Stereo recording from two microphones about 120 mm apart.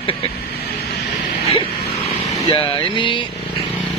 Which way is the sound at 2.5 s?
45° left (ahead or behind).